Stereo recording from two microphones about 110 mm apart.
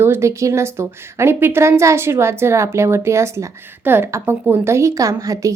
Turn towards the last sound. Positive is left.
turn(degrees=-30)  # may be behind; listen again after turning